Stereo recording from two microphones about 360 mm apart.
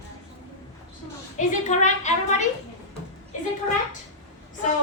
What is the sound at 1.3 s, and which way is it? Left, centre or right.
A woman's voice, centre.